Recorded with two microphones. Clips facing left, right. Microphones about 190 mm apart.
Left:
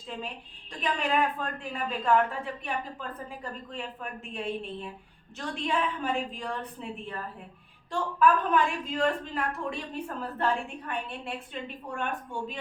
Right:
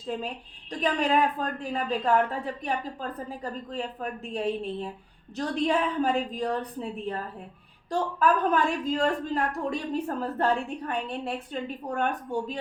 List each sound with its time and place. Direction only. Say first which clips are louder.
0.1 s a woman's voice: right 5 dB; 45° right (ahead or behind)